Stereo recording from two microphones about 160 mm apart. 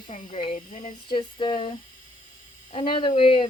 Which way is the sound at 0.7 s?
60° left (ahead or behind).